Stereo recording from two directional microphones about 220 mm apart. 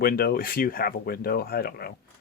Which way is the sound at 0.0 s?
45° left (ahead or behind).